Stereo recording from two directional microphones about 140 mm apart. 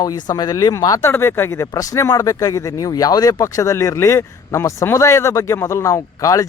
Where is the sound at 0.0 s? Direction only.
30° left (ahead or behind).